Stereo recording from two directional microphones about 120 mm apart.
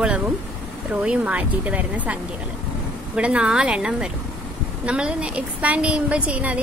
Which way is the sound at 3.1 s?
10° right (ahead or behind).